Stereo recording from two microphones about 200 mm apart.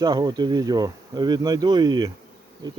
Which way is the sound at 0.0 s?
20° right (ahead or behind).